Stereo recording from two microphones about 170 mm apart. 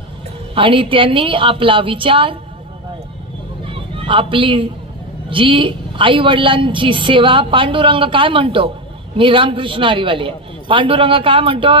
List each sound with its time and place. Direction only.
0.6 s a man's voice: 30° right (ahead or behind)
3.6 s a sound: 30° right (ahead or behind)
5.3 s a woman's voice: 30° right (ahead or behind)